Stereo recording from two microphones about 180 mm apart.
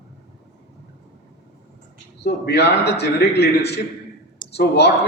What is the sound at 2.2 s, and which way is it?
A man's voice, 65° left (ahead or behind).